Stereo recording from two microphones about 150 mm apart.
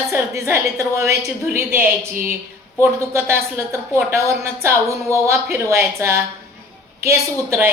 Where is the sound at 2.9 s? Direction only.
15° right (ahead or behind).